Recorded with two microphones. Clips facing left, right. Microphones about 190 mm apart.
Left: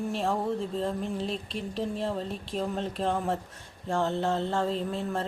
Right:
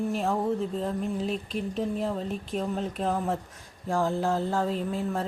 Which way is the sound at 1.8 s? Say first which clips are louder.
Right 1 dB; centre (ahead or behind).